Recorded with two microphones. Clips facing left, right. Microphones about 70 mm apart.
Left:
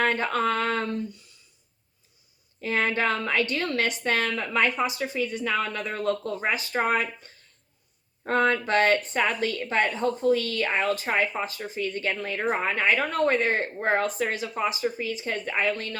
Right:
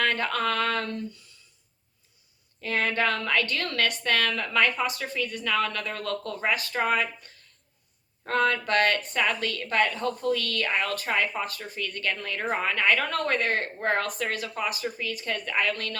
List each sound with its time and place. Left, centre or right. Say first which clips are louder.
0.0 s a woman's voice: left 2 dB; left
2.6 s a woman's voice: left 1 dB; left
6.7 s speech: left 3 dB; left
8.3 s a woman's voice: left 2 dB; left